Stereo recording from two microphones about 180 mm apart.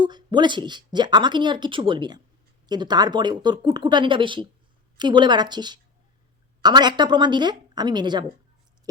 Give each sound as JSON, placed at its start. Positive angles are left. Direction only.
{"t": 0.0, "sound": "speech", "side_deg": -25}